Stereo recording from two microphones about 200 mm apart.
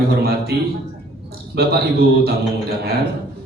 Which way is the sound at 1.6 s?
55° right (ahead or behind).